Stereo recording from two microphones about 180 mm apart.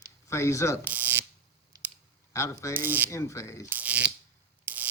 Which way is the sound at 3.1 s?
15° left (ahead or behind).